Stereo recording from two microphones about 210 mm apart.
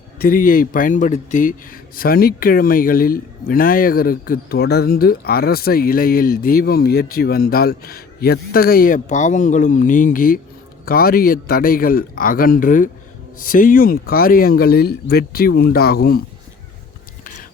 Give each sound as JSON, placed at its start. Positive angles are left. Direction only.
{"t": 0.2, "sound": "speech", "side_deg": 40}